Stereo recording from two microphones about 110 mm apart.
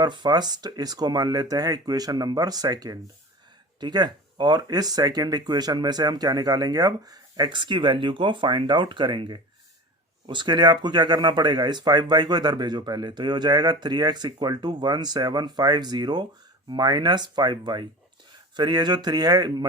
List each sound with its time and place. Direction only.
0.0 s speech: 40° right (ahead or behind)